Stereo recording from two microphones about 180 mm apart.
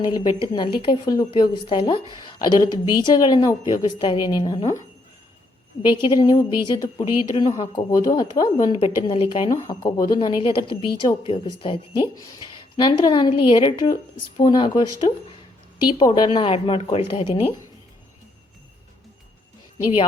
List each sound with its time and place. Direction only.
0.0 s speech: 25° left (ahead or behind)
5.8 s speech: 25° left (ahead or behind)